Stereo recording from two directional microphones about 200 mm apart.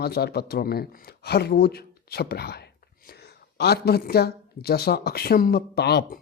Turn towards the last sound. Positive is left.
turn(degrees=55)  # may be behind; listen again after turning